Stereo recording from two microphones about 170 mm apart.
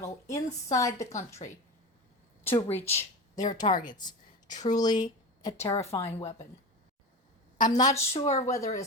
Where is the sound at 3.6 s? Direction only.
40° left (ahead or behind).